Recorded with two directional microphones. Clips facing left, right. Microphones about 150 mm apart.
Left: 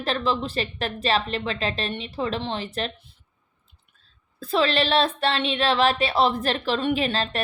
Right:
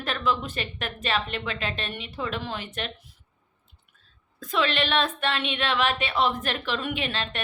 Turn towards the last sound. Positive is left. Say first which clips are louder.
# left 6 dB
turn(degrees=35)  # may be behind; listen again after turning